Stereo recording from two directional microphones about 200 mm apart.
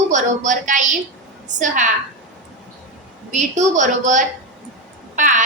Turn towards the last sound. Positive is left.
turn(degrees=-40)  # may be behind; listen again after turning